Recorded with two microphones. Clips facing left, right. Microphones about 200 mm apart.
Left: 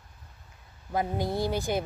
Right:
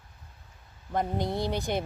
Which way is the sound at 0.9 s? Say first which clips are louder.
Even; 5° left (ahead or behind).